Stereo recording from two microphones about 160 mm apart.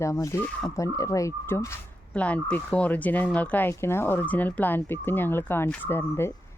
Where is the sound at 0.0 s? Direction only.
20° left (ahead or behind).